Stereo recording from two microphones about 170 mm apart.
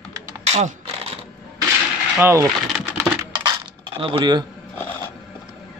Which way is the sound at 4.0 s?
30° right (ahead or behind).